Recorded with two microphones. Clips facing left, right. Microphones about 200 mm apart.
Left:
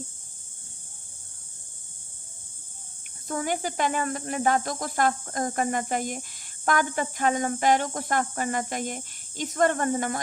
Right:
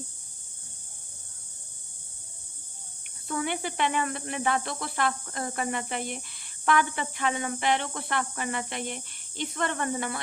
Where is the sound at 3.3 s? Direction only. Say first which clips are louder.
Left 2 dB; 40° left (ahead or behind).